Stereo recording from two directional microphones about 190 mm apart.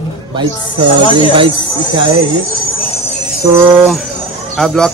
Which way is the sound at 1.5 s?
25° left (ahead or behind).